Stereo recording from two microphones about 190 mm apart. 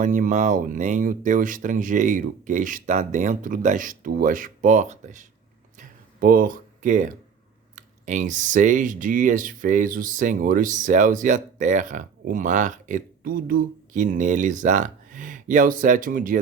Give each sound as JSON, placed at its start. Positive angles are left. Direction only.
{"t": 0.0, "sound": "speech", "side_deg": -45}
{"t": 5.7, "sound": "a sound", "side_deg": -45}
{"t": 7.8, "sound": "speech", "side_deg": -40}